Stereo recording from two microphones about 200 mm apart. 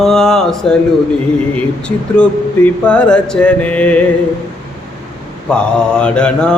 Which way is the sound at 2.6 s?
5° left (ahead or behind).